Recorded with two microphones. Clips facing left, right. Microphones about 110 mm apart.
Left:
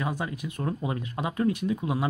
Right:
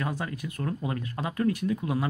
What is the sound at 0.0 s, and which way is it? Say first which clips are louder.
Speech: left 1 dB; 15° left (ahead or behind).